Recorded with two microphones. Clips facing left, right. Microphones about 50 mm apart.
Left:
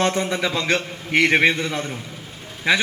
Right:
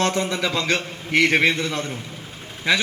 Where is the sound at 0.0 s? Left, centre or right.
Left.